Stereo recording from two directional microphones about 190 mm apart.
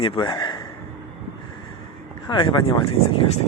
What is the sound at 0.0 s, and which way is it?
Speech, 25° left (ahead or behind).